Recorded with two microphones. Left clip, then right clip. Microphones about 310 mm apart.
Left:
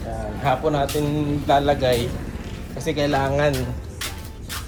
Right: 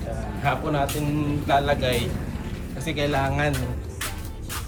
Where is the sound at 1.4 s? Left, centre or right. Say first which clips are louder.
Left 4 dB; centre.